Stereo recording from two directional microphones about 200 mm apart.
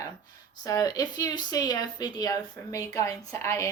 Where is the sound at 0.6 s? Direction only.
15° left (ahead or behind).